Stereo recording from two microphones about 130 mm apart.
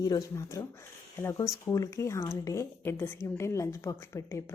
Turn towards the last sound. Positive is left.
turn(degrees=20)  # may be behind; listen again after turning